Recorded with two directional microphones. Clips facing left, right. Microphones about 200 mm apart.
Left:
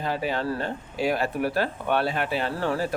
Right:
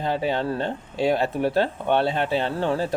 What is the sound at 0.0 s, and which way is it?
Speech, 25° right (ahead or behind).